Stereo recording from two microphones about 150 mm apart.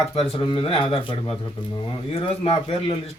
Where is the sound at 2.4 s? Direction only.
40° left (ahead or behind).